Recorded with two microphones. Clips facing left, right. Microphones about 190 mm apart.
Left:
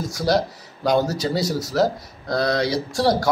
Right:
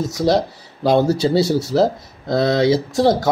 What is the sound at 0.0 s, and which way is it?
A man's voice, 25° right (ahead or behind).